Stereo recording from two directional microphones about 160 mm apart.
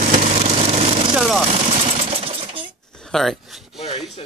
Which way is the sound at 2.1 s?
35° right (ahead or behind).